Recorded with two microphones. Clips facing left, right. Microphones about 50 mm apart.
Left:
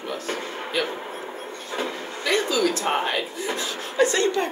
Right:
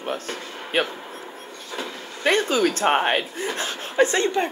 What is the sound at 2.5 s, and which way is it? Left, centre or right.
Speech, right.